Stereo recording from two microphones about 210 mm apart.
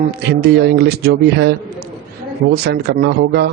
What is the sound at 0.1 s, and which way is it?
Speech, 50° right (ahead or behind).